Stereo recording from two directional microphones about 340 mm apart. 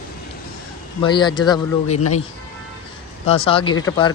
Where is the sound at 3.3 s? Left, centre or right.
Centre.